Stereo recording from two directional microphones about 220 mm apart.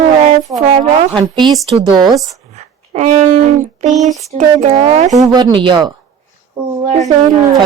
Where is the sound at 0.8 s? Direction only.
20° right (ahead or behind).